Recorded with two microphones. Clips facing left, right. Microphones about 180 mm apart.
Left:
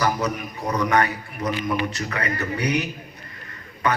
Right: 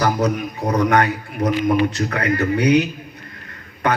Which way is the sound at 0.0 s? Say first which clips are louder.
Right 5 dB; 45° right (ahead or behind).